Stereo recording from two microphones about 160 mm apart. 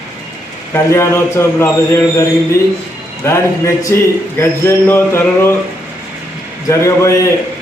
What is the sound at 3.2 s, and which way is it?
A man's voice, 15° left (ahead or behind).